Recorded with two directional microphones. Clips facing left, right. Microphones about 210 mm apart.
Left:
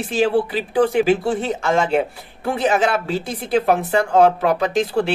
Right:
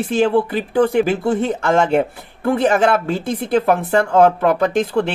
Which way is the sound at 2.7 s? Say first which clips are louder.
Right 3 dB; 55° right (ahead or behind).